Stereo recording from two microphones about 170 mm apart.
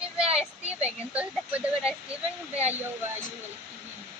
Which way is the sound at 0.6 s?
10° right (ahead or behind).